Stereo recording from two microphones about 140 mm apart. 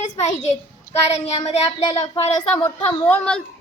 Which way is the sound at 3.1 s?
5° left (ahead or behind).